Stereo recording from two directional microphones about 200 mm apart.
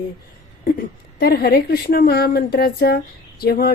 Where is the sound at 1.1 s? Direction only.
50° left (ahead or behind).